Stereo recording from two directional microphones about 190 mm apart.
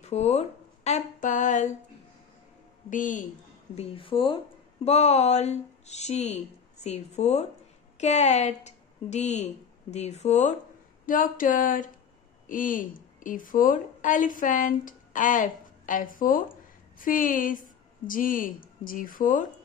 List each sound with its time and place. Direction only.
0.0 s speech: 35° left (ahead or behind)
2.9 s a woman's voice: 40° left (ahead or behind)
3.7 s a woman's voice: 30° left (ahead or behind)
11.1 s a woman's voice: 45° left (ahead or behind)